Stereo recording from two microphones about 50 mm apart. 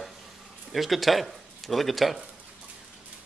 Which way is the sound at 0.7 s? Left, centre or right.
Centre.